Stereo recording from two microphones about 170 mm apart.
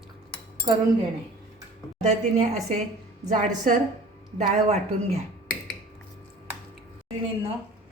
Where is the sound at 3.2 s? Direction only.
45° right (ahead or behind).